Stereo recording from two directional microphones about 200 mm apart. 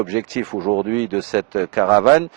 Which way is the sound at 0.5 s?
25° right (ahead or behind).